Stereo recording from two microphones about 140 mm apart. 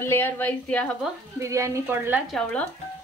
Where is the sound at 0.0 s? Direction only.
15° left (ahead or behind).